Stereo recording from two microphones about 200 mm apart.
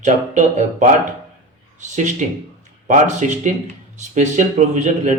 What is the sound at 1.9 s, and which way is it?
Speech, 40° right (ahead or behind).